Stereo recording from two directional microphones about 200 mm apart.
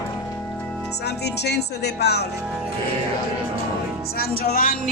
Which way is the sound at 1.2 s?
55° left (ahead or behind).